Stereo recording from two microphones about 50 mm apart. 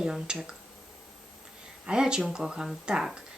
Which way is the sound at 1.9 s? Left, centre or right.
Centre.